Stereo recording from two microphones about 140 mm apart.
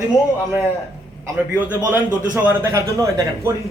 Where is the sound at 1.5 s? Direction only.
10° right (ahead or behind).